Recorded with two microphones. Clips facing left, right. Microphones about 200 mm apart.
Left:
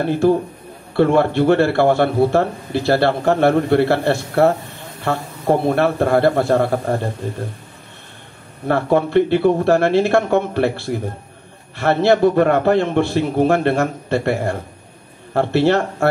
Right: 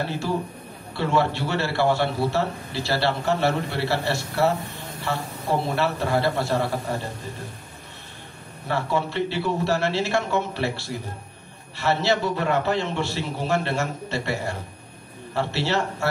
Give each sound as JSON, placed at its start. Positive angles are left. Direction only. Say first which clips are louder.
{"t": 0.0, "sound": "a man's voice", "louder": "left 11 dB", "side_deg": 55}
{"t": 8.6, "sound": "a man's voice", "louder": "left 9 dB", "side_deg": 55}